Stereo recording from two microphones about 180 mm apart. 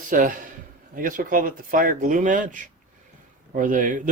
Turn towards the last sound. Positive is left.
turn(degrees=-45)  # may be behind; listen again after turning